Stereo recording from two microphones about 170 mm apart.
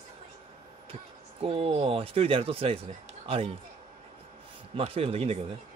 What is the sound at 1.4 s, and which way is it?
Speech, 35° right (ahead or behind).